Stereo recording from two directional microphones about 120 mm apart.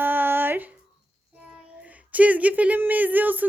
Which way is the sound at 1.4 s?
10° right (ahead or behind).